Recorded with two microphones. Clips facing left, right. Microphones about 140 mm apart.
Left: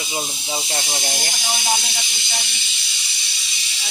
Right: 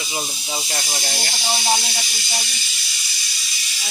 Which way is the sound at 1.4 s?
20° right (ahead or behind).